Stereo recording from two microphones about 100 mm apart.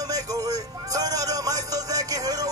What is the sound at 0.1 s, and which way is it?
Music, 40° right (ahead or behind).